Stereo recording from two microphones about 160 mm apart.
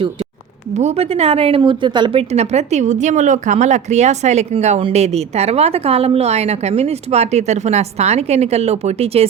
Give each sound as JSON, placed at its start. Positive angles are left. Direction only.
{"t": 0.8, "sound": "a woman's voice", "side_deg": -40}
{"t": 2.3, "sound": "speech", "side_deg": -45}